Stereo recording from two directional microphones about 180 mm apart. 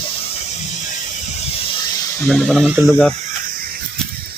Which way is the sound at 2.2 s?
Centre (ahead or behind).